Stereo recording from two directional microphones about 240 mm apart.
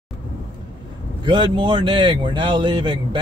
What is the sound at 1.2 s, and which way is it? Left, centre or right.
Speech, centre.